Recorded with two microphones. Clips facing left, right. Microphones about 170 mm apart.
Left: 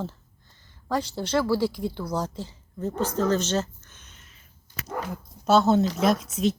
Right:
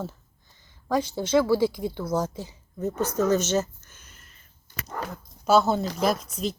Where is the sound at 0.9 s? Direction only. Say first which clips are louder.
Right 2 dB; 15° right (ahead or behind).